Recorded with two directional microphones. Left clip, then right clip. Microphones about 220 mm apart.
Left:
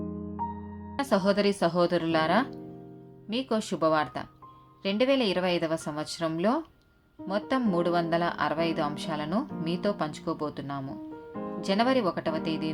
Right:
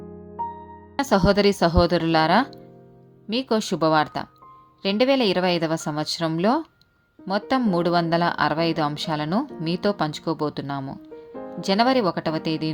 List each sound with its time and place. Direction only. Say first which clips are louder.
0.9 s speech: right 6 dB; 40° right (ahead or behind)